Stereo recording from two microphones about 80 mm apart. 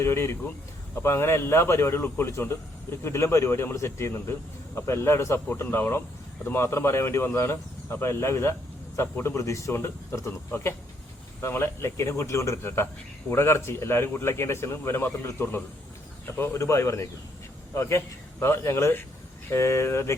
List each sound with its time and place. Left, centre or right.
0.0 s a man's voice: left